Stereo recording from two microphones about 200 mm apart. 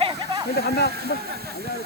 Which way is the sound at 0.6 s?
50° left (ahead or behind).